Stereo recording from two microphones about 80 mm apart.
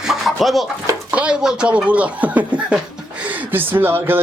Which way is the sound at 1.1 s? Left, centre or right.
Centre.